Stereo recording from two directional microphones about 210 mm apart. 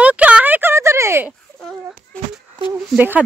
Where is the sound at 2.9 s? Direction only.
5° right (ahead or behind).